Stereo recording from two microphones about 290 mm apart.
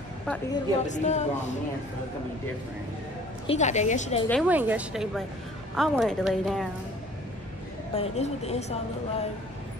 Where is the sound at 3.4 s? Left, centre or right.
Left.